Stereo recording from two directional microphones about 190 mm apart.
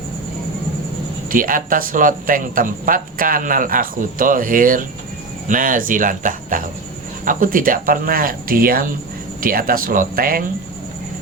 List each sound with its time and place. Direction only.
1.3 s speech: 45° right (ahead or behind)